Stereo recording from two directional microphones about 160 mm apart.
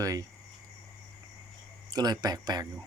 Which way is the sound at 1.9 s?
25° right (ahead or behind).